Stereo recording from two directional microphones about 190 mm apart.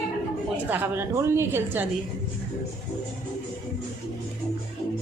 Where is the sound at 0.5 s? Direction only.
10° right (ahead or behind).